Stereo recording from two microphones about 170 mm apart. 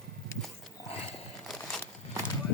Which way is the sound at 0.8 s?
35° left (ahead or behind).